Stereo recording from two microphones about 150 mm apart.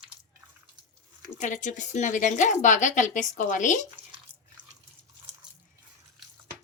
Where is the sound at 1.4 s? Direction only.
55° left (ahead or behind).